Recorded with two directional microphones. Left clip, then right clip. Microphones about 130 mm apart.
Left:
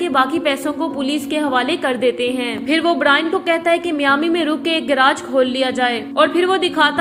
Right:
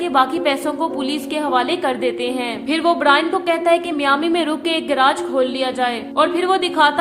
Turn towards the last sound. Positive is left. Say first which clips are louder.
# even
turn(degrees=5)  # may be behind; listen again after turning